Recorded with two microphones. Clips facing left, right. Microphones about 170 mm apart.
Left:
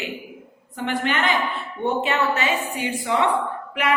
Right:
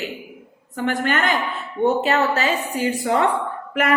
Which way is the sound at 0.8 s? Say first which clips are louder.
Right 2 dB; 45° right (ahead or behind).